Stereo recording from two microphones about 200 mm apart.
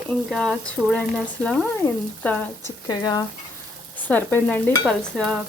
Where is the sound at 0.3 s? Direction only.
5° left (ahead or behind).